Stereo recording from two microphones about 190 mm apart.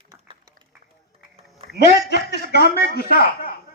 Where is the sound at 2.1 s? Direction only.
60° left (ahead or behind).